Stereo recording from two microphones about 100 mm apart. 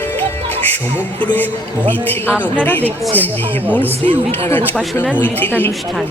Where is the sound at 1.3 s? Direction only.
20° left (ahead or behind).